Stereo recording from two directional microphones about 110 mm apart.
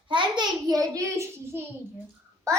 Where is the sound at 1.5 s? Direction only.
20° right (ahead or behind).